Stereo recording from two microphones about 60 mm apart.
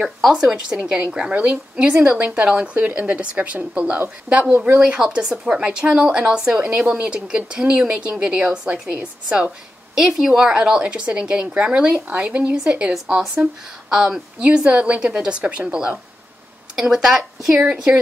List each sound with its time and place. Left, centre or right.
0.3 s a woman's voice: centre
4.7 s a woman's voice: centre
13.8 s a woman's voice: centre
16.7 s a woman's voice: centre